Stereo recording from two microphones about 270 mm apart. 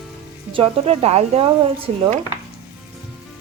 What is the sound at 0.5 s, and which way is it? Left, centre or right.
Speech, right.